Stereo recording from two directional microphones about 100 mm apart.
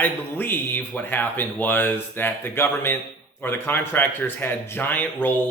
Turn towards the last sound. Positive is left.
turn(degrees=20)  # may be behind; listen again after turning